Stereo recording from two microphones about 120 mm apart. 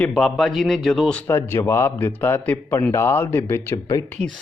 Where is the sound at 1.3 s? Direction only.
20° left (ahead or behind).